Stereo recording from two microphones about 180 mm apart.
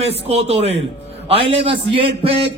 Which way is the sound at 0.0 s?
35° right (ahead or behind).